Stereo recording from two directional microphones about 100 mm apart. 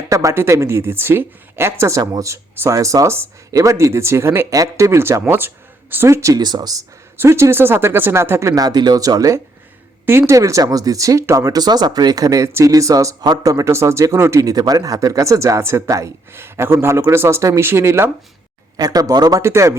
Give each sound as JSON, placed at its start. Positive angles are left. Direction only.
{"t": 0.1, "sound": "a woman's voice", "side_deg": -30}
{"t": 7.2, "sound": "a woman's voice", "side_deg": -25}
{"t": 18.8, "sound": "speech", "side_deg": -40}
{"t": 19.4, "sound": "a woman's voice", "side_deg": -30}